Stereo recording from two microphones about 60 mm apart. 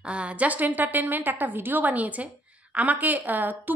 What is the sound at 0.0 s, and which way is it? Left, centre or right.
A woman's voice, centre.